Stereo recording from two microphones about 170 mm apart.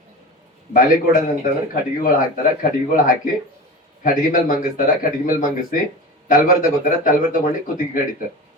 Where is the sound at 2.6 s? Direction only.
55° left (ahead or behind).